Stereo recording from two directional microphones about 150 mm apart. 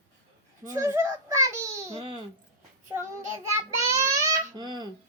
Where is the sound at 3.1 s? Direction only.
20° right (ahead or behind).